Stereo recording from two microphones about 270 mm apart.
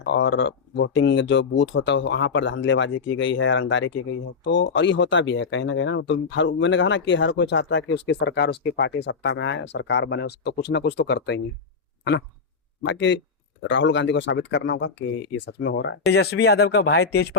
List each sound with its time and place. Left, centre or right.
0.0 s speech: left
12.9 s speech: left